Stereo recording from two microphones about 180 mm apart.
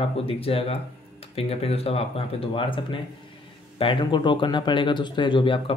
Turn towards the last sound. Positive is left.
turn(degrees=30)  # may be behind; listen again after turning